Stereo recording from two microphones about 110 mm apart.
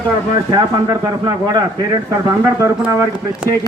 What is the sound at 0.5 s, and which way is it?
Speech, 35° right (ahead or behind).